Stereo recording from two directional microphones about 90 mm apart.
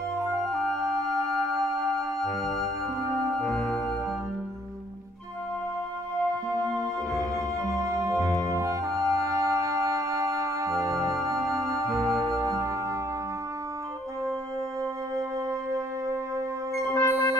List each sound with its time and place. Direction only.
0.7 s music: 35° right (ahead or behind)
3.3 s organ: 5° left (ahead or behind)
6.5 s music: 45° right (ahead or behind)
8.2 s music: 10° left (ahead or behind)
8.5 s music: 35° right (ahead or behind)
16.9 s music: 35° left (ahead or behind)